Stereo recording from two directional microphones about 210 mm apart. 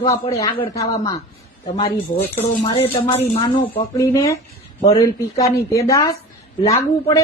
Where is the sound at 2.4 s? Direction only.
30° left (ahead or behind).